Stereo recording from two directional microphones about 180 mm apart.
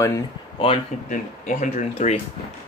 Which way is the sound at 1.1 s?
45° left (ahead or behind).